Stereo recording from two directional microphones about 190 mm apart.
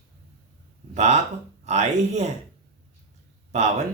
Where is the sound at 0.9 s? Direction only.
35° right (ahead or behind).